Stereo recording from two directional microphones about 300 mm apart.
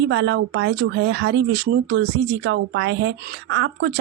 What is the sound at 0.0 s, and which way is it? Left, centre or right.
Speech, right.